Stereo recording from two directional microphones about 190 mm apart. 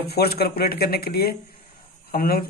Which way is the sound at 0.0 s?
55° left (ahead or behind).